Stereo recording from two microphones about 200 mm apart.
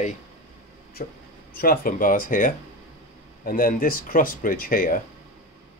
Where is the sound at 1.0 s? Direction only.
40° left (ahead or behind).